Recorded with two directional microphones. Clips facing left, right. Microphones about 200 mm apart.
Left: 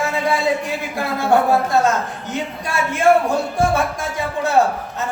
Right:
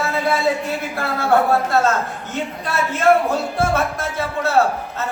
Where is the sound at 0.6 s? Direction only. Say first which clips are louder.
Even; 15° left (ahead or behind).